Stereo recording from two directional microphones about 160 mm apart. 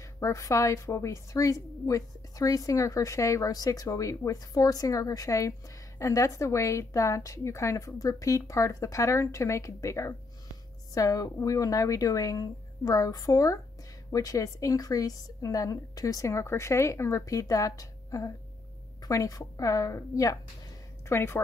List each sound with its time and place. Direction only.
0.2 s a woman's voice: 20° left (ahead or behind)